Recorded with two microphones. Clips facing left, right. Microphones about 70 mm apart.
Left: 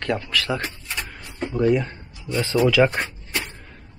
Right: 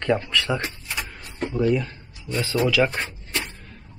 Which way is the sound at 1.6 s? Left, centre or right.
Centre.